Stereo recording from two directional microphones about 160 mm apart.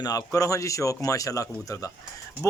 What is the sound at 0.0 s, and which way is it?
A man's voice, 20° left (ahead or behind).